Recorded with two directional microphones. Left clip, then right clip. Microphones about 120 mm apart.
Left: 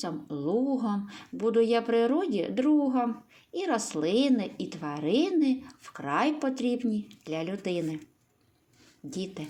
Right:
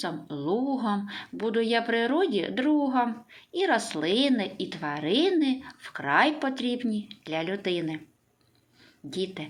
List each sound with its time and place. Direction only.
0.0 s a woman's voice: 45° left (ahead or behind)
9.0 s a woman's voice: 50° left (ahead or behind)